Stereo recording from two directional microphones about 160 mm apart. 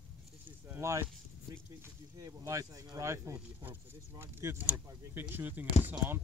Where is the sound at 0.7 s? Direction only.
15° right (ahead or behind).